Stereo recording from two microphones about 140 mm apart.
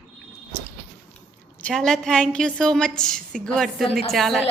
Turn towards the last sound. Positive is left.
turn(degrees=0)  # may be behind; listen again after turning